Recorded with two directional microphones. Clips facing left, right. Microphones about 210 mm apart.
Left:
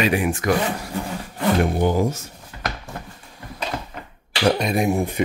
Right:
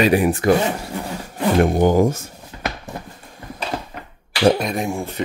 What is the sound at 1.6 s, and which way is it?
Speech, 45° right (ahead or behind).